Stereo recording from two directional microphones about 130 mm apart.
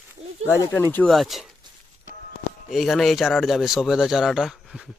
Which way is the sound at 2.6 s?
Centre (ahead or behind).